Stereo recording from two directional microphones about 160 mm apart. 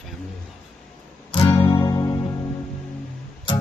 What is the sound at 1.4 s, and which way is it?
Music, 35° left (ahead or behind).